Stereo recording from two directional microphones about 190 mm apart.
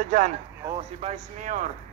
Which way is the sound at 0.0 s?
40° right (ahead or behind).